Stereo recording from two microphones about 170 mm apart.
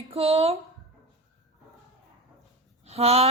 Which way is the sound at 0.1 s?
35° right (ahead or behind).